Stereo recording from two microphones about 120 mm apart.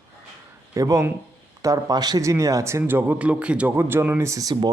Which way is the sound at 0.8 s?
25° right (ahead or behind).